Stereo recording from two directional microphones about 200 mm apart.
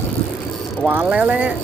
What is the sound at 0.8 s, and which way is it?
Speech, 5° right (ahead or behind).